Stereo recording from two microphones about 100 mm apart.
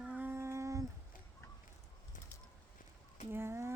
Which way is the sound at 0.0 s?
15° right (ahead or behind).